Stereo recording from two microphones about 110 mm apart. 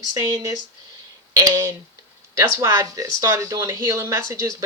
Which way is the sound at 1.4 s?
25° right (ahead or behind).